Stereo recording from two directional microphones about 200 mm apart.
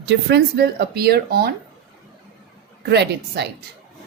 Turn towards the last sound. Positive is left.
turn(degrees=-55)  # may be behind; listen again after turning